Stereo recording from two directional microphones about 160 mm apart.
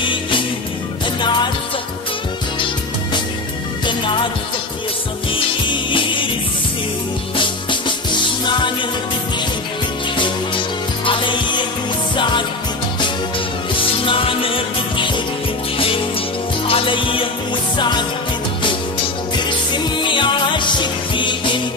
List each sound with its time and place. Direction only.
0.0 s music: 30° left (ahead or behind)
3.8 s music: 30° left (ahead or behind)
5.3 s music: 30° left (ahead or behind)
7.3 s music: 30° left (ahead or behind)
10.1 s music: 30° left (ahead or behind)
13.7 s music: 35° left (ahead or behind)
16.6 s music: 35° left (ahead or behind)
19.3 s music: 30° left (ahead or behind)